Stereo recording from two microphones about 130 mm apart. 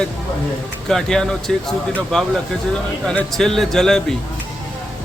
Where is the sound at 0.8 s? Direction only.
5° left (ahead or behind).